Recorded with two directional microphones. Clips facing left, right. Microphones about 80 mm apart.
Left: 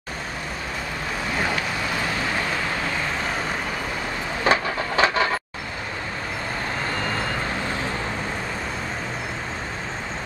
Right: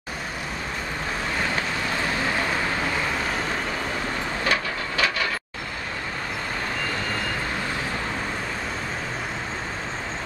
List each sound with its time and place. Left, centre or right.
4.5 s train: left